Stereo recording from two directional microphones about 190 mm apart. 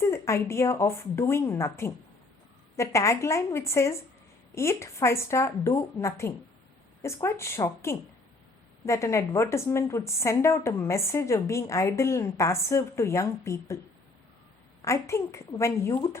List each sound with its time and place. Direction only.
0.0 s a woman's voice: 15° left (ahead or behind)
14.8 s a woman's voice: 15° left (ahead or behind)